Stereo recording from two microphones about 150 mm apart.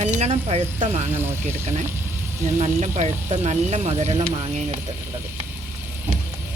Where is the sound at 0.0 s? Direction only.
50° right (ahead or behind).